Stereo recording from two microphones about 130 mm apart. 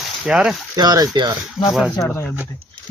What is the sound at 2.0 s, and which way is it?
Speech, 15° left (ahead or behind).